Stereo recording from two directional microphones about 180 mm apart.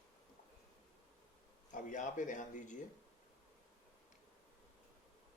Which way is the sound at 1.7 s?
45° left (ahead or behind).